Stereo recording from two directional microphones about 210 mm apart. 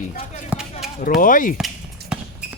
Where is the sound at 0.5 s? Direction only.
5° right (ahead or behind).